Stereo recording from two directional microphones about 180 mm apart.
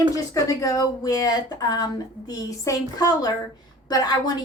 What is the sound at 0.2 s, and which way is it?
Speech, 20° left (ahead or behind).